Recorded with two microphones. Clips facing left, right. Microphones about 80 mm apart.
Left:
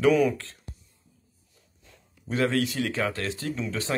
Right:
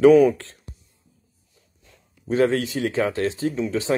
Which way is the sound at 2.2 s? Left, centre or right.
Right.